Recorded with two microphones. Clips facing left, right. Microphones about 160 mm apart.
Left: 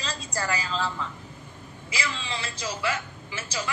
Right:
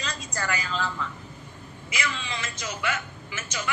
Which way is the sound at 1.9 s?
30° left (ahead or behind).